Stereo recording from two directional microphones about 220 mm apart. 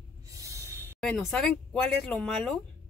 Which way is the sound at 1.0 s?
Centre (ahead or behind).